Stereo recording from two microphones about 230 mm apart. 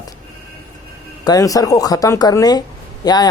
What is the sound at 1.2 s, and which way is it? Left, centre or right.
Speech, centre.